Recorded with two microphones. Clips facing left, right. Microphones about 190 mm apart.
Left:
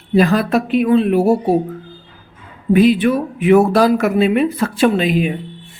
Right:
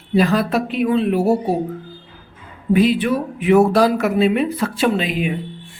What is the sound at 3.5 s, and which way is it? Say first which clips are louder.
Speech: left 2 dB; 50° left (ahead or behind).